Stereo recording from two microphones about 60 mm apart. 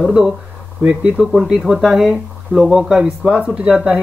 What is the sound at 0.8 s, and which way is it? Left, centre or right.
Speech, right.